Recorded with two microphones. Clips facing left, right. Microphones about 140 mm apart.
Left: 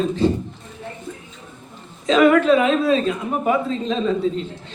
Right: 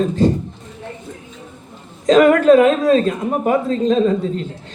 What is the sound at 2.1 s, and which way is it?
A man's voice, 45° right (ahead or behind).